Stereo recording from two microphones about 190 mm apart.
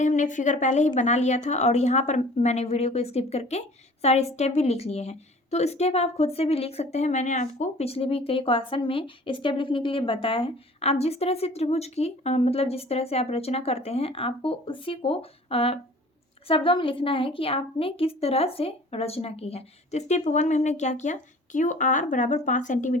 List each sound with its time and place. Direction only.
0.0 s a woman's voice: 40° left (ahead or behind)